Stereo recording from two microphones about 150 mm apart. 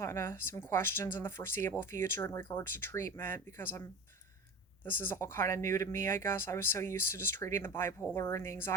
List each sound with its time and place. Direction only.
0.0 s speech: 20° left (ahead or behind)
4.9 s speech: 15° left (ahead or behind)